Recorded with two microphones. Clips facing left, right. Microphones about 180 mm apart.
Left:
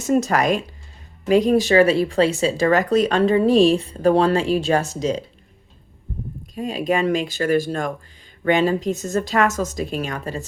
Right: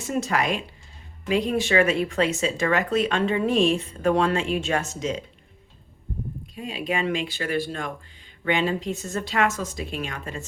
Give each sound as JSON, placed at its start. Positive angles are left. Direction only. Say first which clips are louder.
{"t": 0.0, "sound": "speech", "louder": "left 7 dB", "side_deg": 45}
{"t": 6.5, "sound": "speech", "louder": "left 7 dB", "side_deg": 40}